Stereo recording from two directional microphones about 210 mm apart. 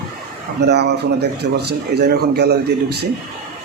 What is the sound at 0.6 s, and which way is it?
A man's voice, 50° right (ahead or behind).